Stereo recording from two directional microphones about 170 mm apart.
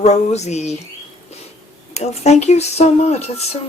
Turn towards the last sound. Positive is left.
turn(degrees=40)  # may be behind; listen again after turning